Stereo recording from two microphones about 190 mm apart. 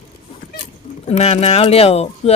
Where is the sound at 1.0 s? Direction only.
35° left (ahead or behind).